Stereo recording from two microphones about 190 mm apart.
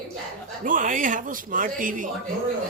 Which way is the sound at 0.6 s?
45° right (ahead or behind).